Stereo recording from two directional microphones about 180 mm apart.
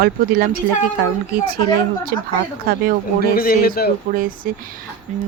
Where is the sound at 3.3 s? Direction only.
55° left (ahead or behind).